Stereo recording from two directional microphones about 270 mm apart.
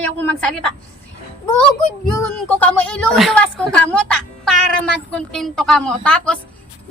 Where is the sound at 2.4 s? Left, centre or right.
Centre.